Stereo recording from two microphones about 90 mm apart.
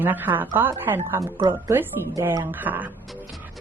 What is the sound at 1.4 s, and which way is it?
Speech, 45° right (ahead or behind).